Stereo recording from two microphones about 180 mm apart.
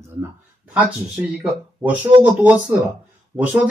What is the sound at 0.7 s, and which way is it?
Speech, 5° right (ahead or behind).